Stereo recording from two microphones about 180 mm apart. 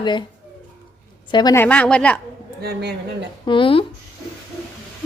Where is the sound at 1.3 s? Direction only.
20° left (ahead or behind).